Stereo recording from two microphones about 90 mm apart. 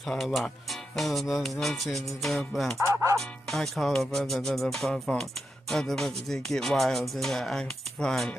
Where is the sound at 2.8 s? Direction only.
35° right (ahead or behind).